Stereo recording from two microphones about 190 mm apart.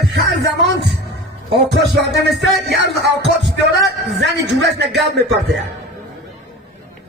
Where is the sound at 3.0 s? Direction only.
65° right (ahead or behind).